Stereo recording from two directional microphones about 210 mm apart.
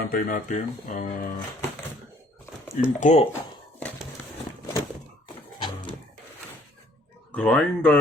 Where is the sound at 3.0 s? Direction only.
35° left (ahead or behind).